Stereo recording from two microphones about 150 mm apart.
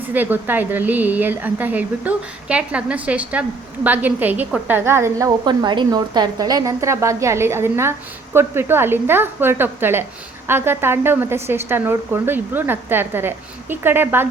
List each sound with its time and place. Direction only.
0.1 s a woman's voice: 10° right (ahead or behind)
5.5 s a woman's voice: 30° right (ahead or behind); by 14.3 s 15° right (ahead or behind)